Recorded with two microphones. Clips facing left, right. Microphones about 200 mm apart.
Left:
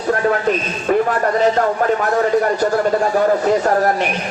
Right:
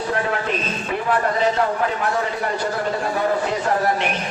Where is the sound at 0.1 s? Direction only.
45° left (ahead or behind).